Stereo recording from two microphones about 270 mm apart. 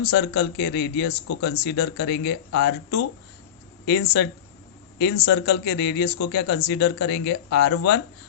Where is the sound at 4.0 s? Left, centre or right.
Left.